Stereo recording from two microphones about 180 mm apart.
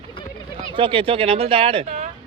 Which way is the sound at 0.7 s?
30° right (ahead or behind).